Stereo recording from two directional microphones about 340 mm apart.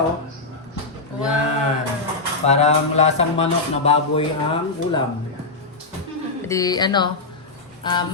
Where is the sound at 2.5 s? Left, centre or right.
Centre.